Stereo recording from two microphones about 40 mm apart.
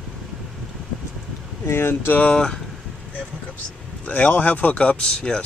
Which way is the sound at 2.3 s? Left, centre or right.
Centre.